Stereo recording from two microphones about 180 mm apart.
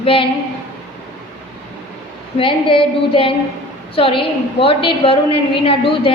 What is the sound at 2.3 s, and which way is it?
A woman's voice, 30° left (ahead or behind).